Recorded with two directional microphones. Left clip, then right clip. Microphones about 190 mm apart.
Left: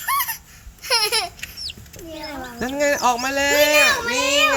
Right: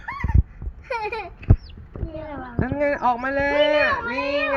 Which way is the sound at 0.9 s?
90° left.